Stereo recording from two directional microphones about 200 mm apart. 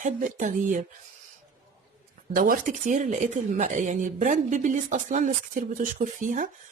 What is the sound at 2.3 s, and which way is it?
Speech, 45° right (ahead or behind).